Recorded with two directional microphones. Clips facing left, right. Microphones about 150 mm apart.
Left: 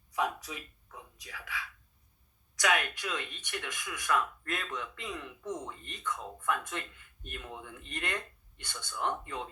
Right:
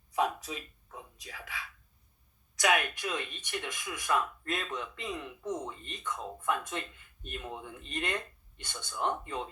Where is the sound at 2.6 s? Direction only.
25° right (ahead or behind).